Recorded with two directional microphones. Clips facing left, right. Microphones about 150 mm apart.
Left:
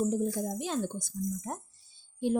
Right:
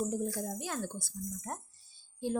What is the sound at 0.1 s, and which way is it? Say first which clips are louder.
A woman's voice: left 5 dB; 20° left (ahead or behind).